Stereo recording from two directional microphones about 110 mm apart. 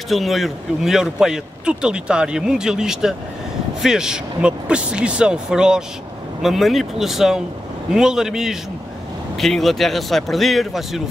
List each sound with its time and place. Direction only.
0.1 s a man's voice: centre (ahead or behind)